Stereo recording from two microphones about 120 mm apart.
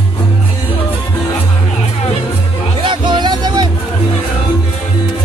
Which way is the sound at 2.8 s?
40° right (ahead or behind).